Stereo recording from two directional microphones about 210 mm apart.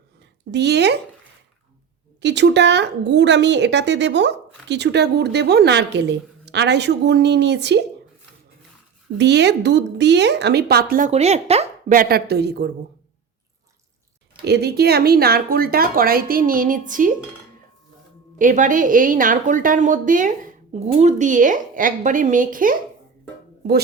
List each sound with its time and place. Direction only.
0.5 s speech: 55° right (ahead or behind)
2.2 s a woman's voice: 55° right (ahead or behind)
9.1 s speech: 55° right (ahead or behind)
14.4 s speech: 50° right (ahead or behind)
18.3 s a woman's voice: 40° right (ahead or behind)